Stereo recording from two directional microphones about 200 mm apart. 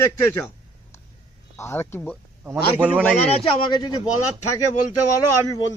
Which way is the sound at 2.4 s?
10° right (ahead or behind).